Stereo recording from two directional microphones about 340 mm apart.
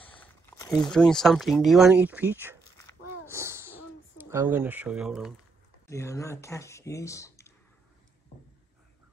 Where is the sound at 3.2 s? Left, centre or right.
Centre.